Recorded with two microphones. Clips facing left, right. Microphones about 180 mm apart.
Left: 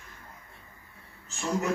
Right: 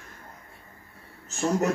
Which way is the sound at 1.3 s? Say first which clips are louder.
Right 5 dB; 45° right (ahead or behind).